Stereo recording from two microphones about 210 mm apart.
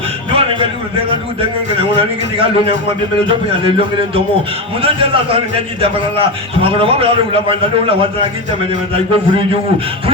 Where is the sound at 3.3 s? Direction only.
25° right (ahead or behind).